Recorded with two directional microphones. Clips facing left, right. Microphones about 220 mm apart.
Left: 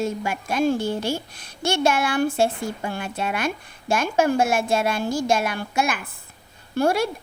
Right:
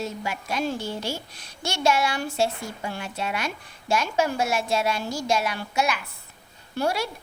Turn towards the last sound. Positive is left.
turn(degrees=50)  # may be behind; listen again after turning